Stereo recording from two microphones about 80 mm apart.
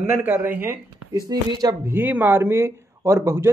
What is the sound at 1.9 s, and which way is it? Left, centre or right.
Speech, right.